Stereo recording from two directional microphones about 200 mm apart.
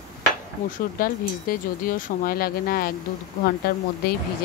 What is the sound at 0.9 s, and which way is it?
Speech, 45° left (ahead or behind).